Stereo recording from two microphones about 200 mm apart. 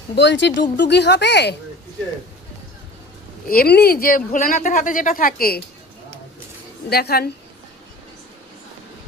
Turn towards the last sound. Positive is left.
turn(degrees=50)  # may be behind; listen again after turning